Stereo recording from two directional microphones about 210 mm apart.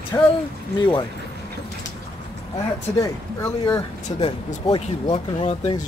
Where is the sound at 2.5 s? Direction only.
15° left (ahead or behind).